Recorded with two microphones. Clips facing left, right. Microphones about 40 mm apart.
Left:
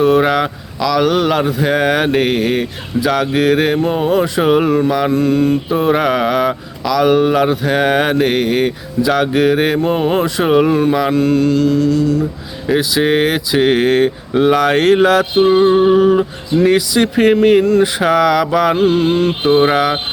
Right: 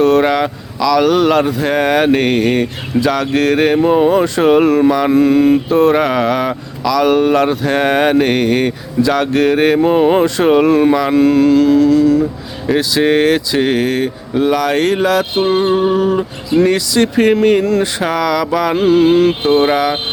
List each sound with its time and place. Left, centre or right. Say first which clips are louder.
0.0 s speech: right 1 dB; centre
3.6 s speech: right 4 dB; centre
5.6 s mantra: right 5 dB; centre
5.9 s speech: right 1 dB; centre
12.6 s mantra: right 1 dB; centre
13.7 s speech: left 3 dB; left
15.7 s mantra: left 3 dB; centre
17.3 s speech: left 1 dB; centre
17.9 s mantra: left 3 dB; centre